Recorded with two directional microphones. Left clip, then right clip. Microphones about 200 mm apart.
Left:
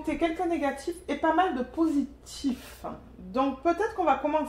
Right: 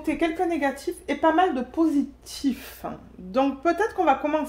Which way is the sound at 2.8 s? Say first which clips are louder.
Right 4 dB; 55° right (ahead or behind).